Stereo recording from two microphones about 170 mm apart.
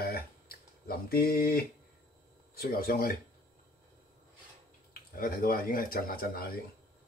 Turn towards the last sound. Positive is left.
turn(degrees=60)  # may be behind; listen again after turning